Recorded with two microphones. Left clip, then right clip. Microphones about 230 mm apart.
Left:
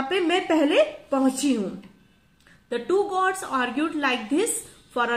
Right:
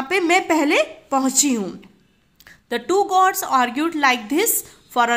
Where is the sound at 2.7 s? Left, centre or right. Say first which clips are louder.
Right 5 dB; right.